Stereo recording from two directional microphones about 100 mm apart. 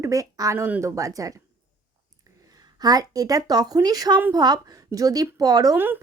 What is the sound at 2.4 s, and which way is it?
Speech, 40° right (ahead or behind).